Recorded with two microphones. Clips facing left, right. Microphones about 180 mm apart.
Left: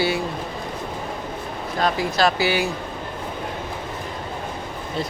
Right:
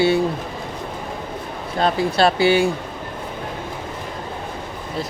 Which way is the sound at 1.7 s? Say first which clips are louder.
Right 3 dB; 30° right (ahead or behind).